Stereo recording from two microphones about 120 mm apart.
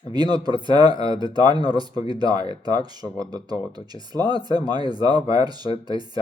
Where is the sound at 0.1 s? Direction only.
35° right (ahead or behind).